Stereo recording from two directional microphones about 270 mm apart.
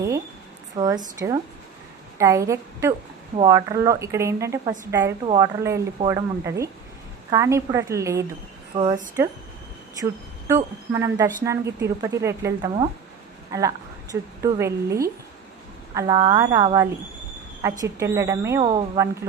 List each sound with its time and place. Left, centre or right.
0.8 s speech: centre
10.5 s a woman's voice: centre